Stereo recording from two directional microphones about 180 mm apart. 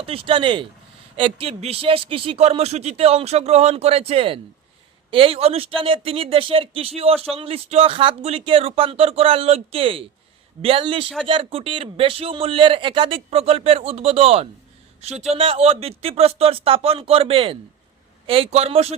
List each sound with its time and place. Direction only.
0.0 s speech: 30° right (ahead or behind)